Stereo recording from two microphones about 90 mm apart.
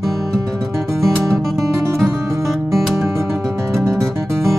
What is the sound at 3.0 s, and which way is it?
Music, 30° right (ahead or behind).